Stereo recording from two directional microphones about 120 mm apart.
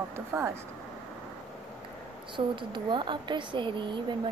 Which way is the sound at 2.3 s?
40° right (ahead or behind).